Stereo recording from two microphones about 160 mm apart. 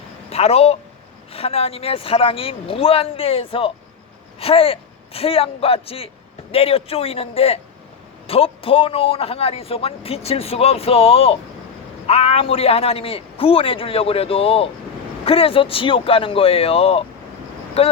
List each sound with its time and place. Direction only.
0.3 s speech: 40° left (ahead or behind)